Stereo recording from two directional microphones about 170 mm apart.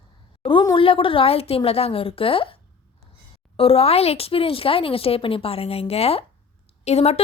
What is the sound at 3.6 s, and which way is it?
A woman's voice, 35° left (ahead or behind).